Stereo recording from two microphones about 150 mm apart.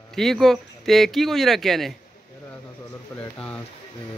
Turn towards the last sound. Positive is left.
turn(degrees=10)  # may be behind; listen again after turning